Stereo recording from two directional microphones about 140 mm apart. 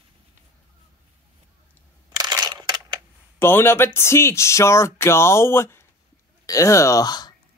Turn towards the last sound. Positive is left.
turn(degrees=30)  # may be behind; listen again after turning